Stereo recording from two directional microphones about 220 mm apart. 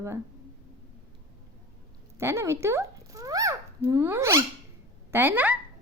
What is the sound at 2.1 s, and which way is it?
A woman's voice, 10° right (ahead or behind).